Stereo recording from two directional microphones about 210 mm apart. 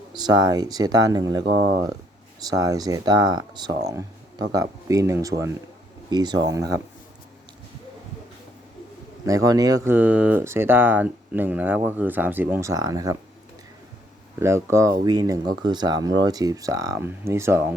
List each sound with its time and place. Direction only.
0.1 s speech: 20° right (ahead or behind)
2.5 s speech: 15° right (ahead or behind)
9.2 s speech: 15° right (ahead or behind)
14.3 s speech: 15° right (ahead or behind)